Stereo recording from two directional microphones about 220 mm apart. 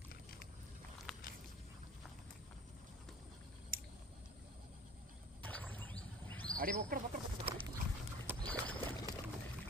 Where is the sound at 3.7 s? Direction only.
40° right (ahead or behind).